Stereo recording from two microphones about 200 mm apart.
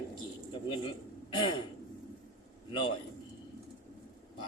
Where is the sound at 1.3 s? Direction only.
25° left (ahead or behind).